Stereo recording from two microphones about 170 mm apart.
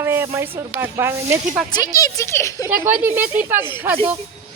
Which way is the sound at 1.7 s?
20° left (ahead or behind).